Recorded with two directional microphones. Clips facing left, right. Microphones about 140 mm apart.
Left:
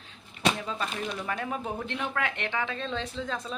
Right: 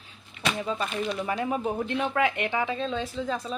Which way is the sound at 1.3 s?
10° right (ahead or behind).